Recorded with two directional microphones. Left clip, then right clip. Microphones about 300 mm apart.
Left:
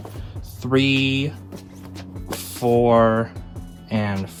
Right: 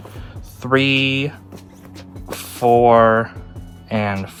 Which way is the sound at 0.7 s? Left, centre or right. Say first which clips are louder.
Right 4 dB; centre.